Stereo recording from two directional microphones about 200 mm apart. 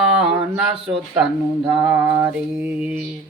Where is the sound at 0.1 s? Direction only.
5° right (ahead or behind).